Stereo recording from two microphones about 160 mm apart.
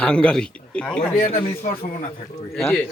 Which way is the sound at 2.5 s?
10° left (ahead or behind).